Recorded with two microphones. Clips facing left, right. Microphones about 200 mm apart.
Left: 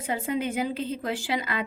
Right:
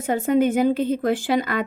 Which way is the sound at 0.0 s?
50° right (ahead or behind).